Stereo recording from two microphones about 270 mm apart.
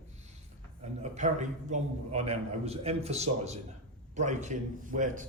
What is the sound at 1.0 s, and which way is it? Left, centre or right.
A man's voice, right.